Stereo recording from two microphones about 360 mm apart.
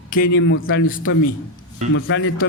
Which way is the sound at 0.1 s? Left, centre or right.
Left.